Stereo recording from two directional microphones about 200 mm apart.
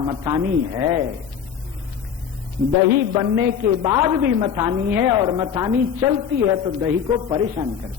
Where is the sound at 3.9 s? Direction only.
15° right (ahead or behind).